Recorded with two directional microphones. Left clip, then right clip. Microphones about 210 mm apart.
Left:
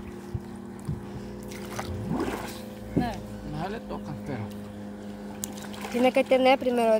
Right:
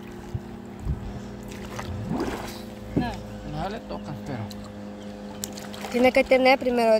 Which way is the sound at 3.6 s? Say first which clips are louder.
Right 2 dB; 20° right (ahead or behind).